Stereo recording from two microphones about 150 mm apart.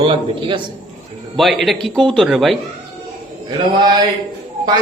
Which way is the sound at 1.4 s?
Centre (ahead or behind).